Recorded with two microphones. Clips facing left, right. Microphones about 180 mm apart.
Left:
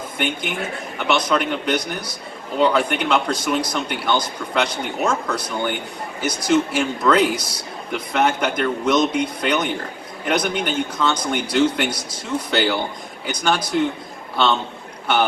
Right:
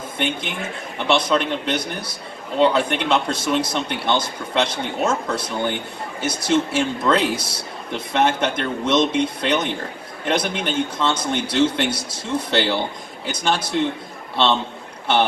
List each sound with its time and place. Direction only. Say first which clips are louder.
0.2 s a man's voice: left 1 dB; 25° right (ahead or behind)